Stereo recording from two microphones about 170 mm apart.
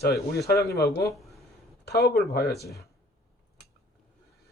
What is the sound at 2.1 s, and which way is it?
Speech, 70° left (ahead or behind).